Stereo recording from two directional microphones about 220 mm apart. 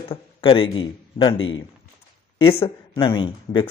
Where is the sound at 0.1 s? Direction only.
25° left (ahead or behind).